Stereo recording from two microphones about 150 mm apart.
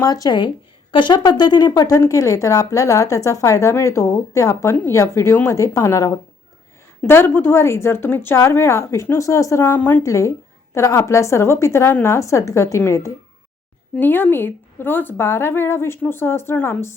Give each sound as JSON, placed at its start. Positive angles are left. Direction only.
{"t": 0.0, "sound": "a woman's voice", "side_deg": 25}